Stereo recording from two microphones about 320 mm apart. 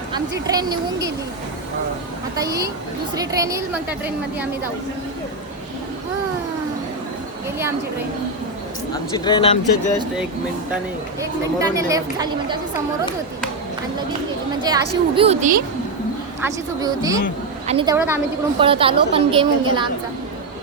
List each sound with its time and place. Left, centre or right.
0.1 s speech: centre
2.4 s speech: centre
9.1 s speech: centre
11.2 s speech: centre
14.6 s speech: centre
16.4 s speech: centre